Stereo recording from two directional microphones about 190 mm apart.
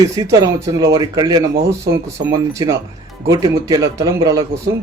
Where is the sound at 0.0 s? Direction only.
15° right (ahead or behind).